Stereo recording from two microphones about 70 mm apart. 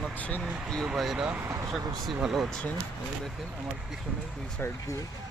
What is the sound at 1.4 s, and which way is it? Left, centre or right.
Speech, right.